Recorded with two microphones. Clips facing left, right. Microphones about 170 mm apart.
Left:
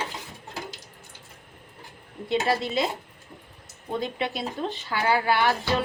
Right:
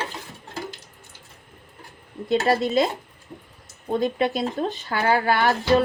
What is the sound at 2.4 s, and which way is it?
Speech, 45° right (ahead or behind).